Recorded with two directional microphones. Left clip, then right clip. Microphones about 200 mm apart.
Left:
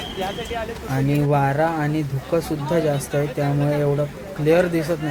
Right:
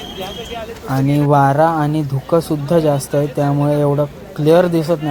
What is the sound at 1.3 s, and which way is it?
Speech, 20° right (ahead or behind).